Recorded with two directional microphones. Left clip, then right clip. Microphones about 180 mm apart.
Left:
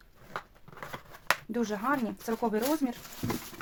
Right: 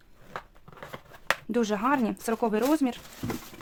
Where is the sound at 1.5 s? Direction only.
50° right (ahead or behind).